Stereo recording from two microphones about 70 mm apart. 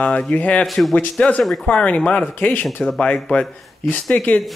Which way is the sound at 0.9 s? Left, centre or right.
Centre.